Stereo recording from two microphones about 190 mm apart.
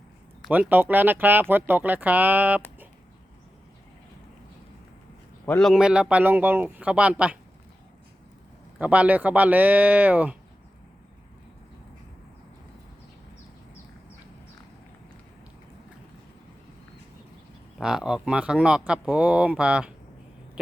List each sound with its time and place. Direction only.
0.4 s speech: 5° right (ahead or behind)
5.5 s speech: 5° left (ahead or behind)
8.8 s speech: 5° right (ahead or behind)
17.7 s speech: centre (ahead or behind)